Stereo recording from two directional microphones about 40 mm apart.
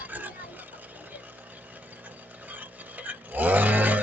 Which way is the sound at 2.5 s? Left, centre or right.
Right.